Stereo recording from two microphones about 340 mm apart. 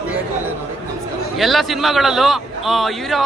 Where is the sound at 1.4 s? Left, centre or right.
Centre.